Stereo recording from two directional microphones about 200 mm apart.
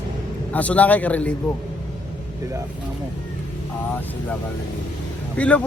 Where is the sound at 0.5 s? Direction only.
5° left (ahead or behind).